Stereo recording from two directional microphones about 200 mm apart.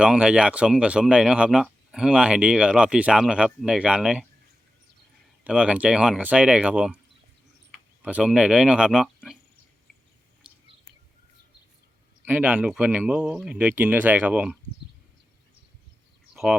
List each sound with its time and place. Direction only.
0.0 s speech: 5° right (ahead or behind)
5.4 s speech: 5° right (ahead or behind)
10.4 s bird: 5° right (ahead or behind)
12.2 s speech: 10° right (ahead or behind)
16.3 s a sound: centre (ahead or behind)